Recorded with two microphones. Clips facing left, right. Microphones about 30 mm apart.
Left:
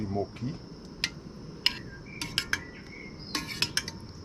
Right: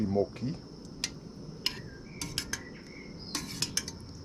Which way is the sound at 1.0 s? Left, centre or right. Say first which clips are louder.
Left 5 dB; left.